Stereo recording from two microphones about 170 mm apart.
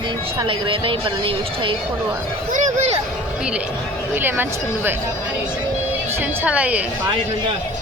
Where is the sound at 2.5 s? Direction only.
45° right (ahead or behind).